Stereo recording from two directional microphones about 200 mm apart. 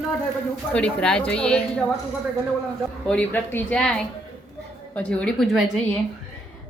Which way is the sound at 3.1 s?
5° left (ahead or behind).